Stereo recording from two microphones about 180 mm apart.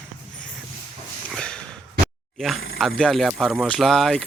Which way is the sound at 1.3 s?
5° left (ahead or behind).